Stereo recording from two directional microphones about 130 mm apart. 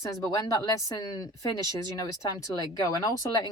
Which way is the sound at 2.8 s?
30° left (ahead or behind).